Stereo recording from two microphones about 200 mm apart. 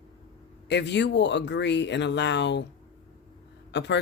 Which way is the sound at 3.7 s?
60° left (ahead or behind).